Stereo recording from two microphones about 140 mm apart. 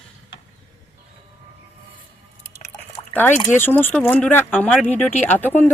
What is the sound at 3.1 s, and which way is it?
Speech, 15° left (ahead or behind).